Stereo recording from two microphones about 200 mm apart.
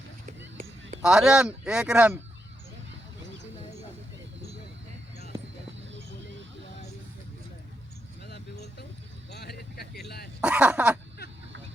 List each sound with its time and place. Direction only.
0.3 s a sound: 35° right (ahead or behind)
1.0 s speech: 5° right (ahead or behind)
9.3 s vehicle: 50° left (ahead or behind)
10.4 s speech: 5° right (ahead or behind)